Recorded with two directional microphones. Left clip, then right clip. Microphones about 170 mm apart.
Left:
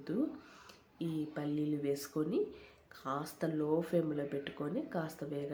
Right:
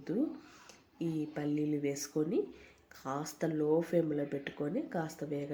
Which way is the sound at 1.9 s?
5° right (ahead or behind).